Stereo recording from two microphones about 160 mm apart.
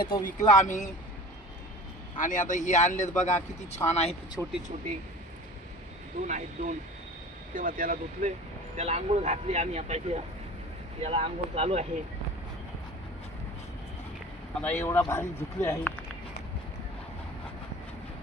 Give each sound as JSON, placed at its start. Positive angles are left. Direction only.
{"t": 0.0, "sound": "speech", "side_deg": 60}
{"t": 2.1, "sound": "speech", "side_deg": 55}
{"t": 4.4, "sound": "speech", "side_deg": 5}
{"t": 6.2, "sound": "speech", "side_deg": -50}
{"t": 8.7, "sound": "speech", "side_deg": -45}
{"t": 14.6, "sound": "speech", "side_deg": 15}